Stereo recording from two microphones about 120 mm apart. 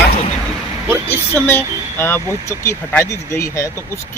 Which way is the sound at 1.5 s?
20° left (ahead or behind).